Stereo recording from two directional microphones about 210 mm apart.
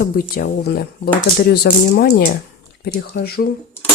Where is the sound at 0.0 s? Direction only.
45° left (ahead or behind).